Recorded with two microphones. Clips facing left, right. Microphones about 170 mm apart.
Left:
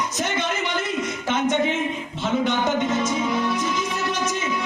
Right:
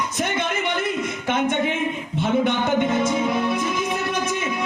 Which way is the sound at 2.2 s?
55° right (ahead or behind).